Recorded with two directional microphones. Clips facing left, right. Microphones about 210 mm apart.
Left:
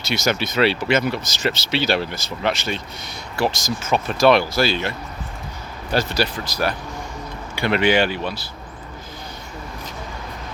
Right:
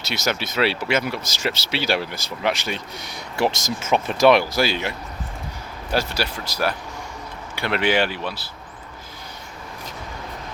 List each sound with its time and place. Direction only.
0.1 s speech: 5° right (ahead or behind)
3.3 s speech: 20° right (ahead or behind); by 8.4 s 5° right (ahead or behind)